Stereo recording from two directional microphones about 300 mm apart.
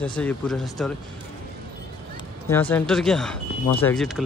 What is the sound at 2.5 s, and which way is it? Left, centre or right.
Speech, centre.